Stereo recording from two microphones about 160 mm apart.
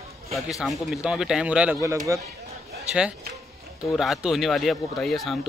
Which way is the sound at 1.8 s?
20° right (ahead or behind).